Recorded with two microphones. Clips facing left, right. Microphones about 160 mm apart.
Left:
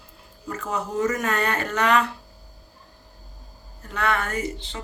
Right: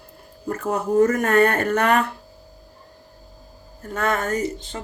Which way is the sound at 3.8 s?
45° right (ahead or behind).